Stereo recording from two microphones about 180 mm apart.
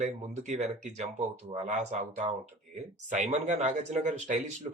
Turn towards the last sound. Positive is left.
turn(degrees=-45)  # may be behind; listen again after turning